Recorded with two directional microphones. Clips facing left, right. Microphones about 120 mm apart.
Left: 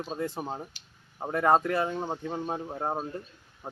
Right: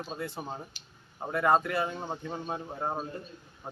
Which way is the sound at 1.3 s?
35° left (ahead or behind).